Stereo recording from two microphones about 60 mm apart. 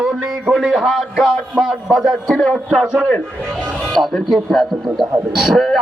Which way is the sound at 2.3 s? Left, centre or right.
Centre.